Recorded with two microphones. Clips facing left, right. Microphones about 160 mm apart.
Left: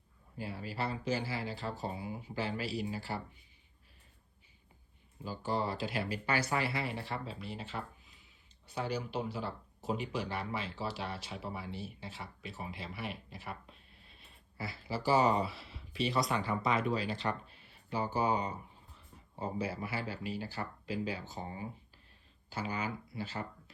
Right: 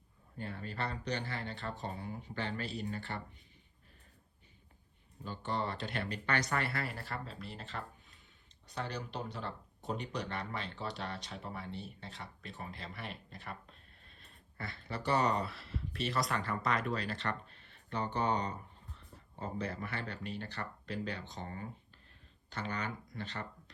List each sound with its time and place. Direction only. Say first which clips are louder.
0.3 s speech: left 2 dB; 5° left (ahead or behind)
5.2 s speech: left 2 dB; 5° left (ahead or behind)